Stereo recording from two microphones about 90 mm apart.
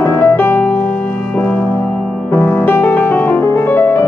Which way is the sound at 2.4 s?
25° left (ahead or behind).